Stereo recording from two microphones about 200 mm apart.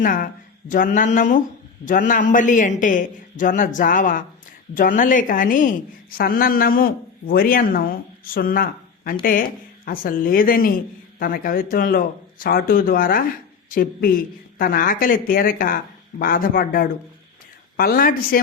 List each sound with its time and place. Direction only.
0.0 s a woman's voice: 45° left (ahead or behind)